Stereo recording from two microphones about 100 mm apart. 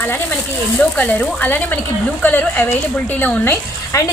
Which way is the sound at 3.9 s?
30° left (ahead or behind).